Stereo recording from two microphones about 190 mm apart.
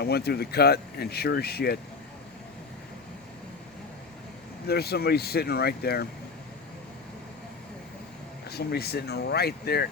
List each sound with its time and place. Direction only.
0.0 s speech: 55° left (ahead or behind)
4.6 s speech: 55° left (ahead or behind)
8.4 s speech: 55° left (ahead or behind)